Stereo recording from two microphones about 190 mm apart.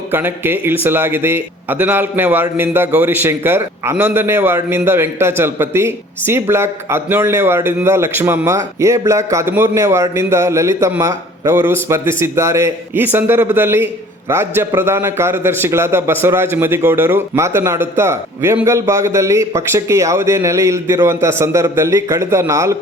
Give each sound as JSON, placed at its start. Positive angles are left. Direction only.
{"t": 0.1, "sound": "a man's voice", "side_deg": -10}